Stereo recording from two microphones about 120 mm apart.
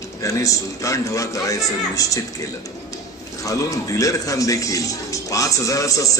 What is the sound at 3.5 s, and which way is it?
Speech, 25° left (ahead or behind).